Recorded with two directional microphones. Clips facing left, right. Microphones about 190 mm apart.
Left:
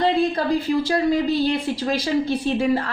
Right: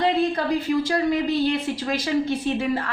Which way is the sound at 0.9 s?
35° left (ahead or behind).